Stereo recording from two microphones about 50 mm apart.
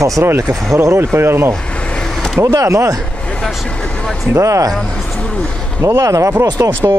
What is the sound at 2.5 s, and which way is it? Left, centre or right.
Speech, right.